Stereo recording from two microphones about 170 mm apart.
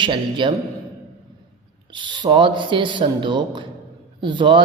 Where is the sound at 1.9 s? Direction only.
30° right (ahead or behind).